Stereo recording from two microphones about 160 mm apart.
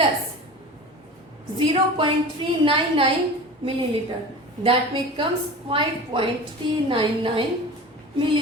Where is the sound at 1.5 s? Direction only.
35° right (ahead or behind).